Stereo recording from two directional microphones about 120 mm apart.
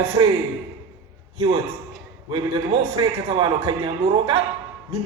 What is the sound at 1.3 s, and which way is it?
A man's voice, 55° right (ahead or behind).